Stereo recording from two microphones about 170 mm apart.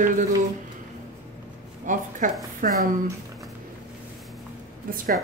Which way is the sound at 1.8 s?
50° right (ahead or behind).